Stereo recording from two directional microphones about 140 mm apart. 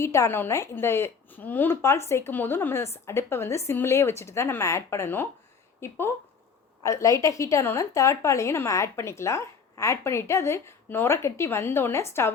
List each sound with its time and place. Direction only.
0.0 s a woman's voice: 20° left (ahead or behind)